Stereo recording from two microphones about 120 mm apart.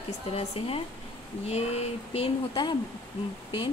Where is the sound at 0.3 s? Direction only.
55° left (ahead or behind).